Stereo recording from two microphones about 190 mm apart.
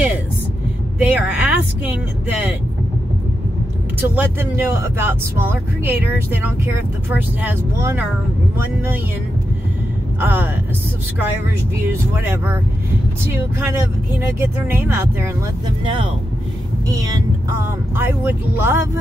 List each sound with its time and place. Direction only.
0.9 s speech: 5° right (ahead or behind)
4.1 s speech: 10° right (ahead or behind)
10.2 s speech: 10° right (ahead or behind)
11.8 s speech: 10° right (ahead or behind)
13.6 s speech: 15° right (ahead or behind)
15.8 s speech: 25° right (ahead or behind)
17.9 s speech: 10° right (ahead or behind)